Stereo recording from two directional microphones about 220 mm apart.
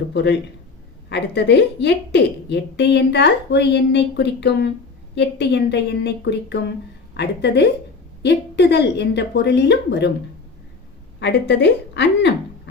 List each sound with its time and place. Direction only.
0.1 s a woman's voice: 50° left (ahead or behind)
11.2 s a woman's voice: 50° left (ahead or behind)